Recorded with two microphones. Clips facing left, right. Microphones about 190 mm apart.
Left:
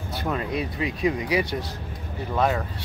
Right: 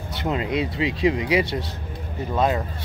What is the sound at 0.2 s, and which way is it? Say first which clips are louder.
Speech: right 4 dB; 20° right (ahead or behind).